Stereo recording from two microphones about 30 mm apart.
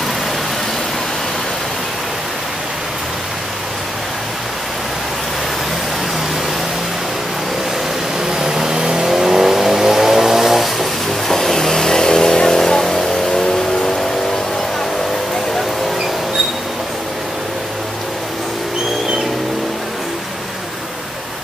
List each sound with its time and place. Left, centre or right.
8.3 s vehicle: centre
9.0 s vehicle: centre